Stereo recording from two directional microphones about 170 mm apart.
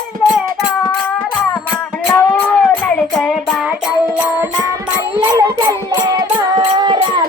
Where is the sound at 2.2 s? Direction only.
15° left (ahead or behind).